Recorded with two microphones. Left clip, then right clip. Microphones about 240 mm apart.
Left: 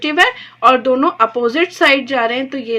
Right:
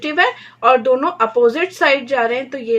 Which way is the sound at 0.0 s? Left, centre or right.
Left.